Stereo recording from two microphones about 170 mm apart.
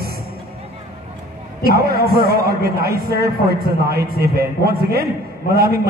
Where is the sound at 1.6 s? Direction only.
65° right (ahead or behind).